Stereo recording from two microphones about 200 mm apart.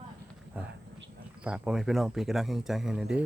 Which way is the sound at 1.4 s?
5° right (ahead or behind).